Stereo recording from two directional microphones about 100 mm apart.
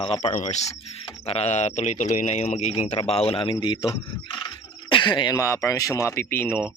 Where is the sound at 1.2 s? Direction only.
90° left.